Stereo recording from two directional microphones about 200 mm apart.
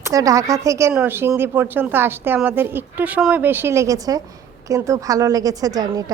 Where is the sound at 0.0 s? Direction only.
15° right (ahead or behind).